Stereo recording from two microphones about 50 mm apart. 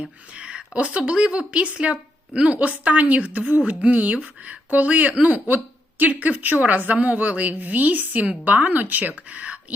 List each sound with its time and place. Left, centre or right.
0.0 s a woman's voice: right